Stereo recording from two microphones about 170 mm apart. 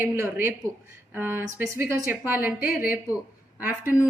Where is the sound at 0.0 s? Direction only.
15° right (ahead or behind).